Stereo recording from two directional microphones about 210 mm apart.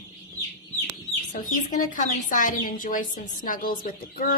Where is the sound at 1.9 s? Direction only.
40° left (ahead or behind).